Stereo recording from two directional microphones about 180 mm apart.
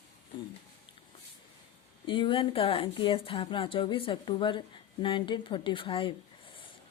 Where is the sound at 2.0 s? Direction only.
30° left (ahead or behind).